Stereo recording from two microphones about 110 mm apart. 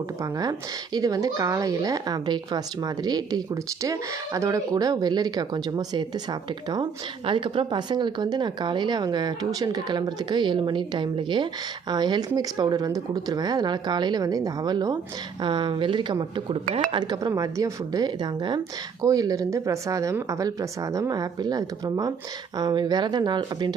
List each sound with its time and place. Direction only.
0.9 s speech: 35° right (ahead or behind)
7.3 s speech: 50° right (ahead or behind)
15.4 s speech: 45° right (ahead or behind)